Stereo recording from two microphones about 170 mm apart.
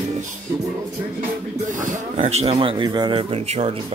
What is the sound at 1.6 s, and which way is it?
Speech, 50° right (ahead or behind).